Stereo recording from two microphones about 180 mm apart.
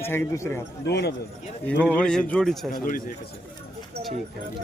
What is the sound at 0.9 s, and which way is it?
Speech, 65° left (ahead or behind).